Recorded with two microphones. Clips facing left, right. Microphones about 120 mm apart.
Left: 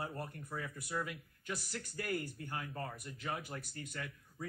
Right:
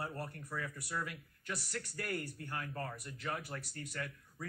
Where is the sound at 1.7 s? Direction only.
45° right (ahead or behind).